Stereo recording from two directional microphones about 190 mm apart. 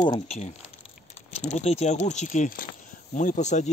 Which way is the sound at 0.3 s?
35° left (ahead or behind).